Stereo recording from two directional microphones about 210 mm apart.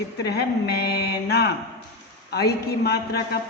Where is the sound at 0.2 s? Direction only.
50° left (ahead or behind).